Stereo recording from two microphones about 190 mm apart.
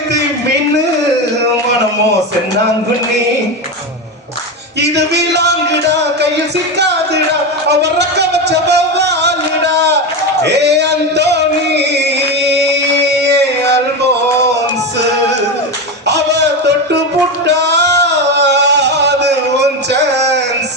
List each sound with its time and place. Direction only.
4.8 s a man's voice: 65° right (ahead or behind)
6.7 s music: 60° right (ahead or behind)
7.7 s a sound: 60° right (ahead or behind)
10.4 s music: 65° right (ahead or behind)
16.0 s a sound: 65° right (ahead or behind)
17.4 s singing: 65° right (ahead or behind)